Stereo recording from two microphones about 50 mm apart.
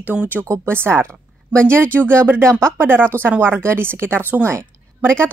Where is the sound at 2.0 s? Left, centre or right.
Right.